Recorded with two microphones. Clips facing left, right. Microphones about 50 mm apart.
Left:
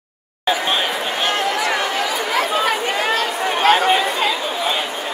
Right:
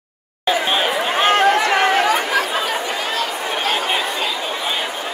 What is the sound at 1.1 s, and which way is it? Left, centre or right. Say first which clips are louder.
Chatter: right 7 dB; right.